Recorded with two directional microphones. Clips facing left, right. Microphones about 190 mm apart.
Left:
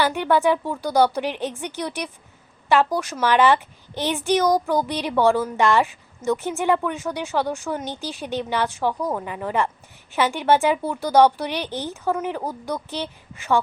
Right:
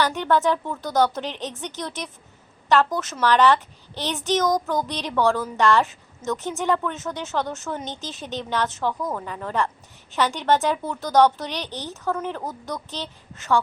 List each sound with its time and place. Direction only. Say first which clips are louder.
0.0 s speech: left 2 dB; 10° left (ahead or behind)
2.6 s a woman's voice: left 1 dB; 15° left (ahead or behind)
11.7 s speech: left 5 dB; 15° right (ahead or behind)
12.0 s speech: left 2 dB; 10° left (ahead or behind)